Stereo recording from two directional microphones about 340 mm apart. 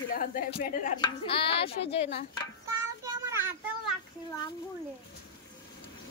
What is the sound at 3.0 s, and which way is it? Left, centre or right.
Speech, centre.